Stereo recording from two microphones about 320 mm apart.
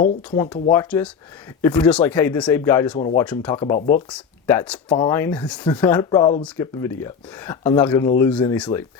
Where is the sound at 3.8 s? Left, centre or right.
Left.